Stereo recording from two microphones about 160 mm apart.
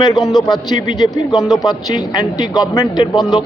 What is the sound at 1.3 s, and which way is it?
Speech, centre (ahead or behind).